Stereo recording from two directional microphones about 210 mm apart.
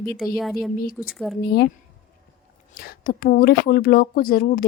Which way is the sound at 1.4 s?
50° left (ahead or behind).